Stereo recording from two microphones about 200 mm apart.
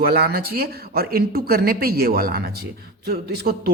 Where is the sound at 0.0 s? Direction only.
50° right (ahead or behind).